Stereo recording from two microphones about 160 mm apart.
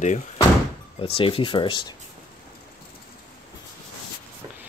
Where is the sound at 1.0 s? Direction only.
35° left (ahead or behind).